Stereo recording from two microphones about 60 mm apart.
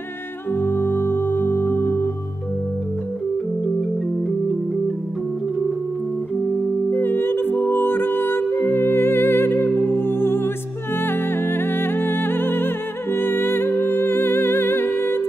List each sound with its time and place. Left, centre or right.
0.6 s music: left
6.9 s music: left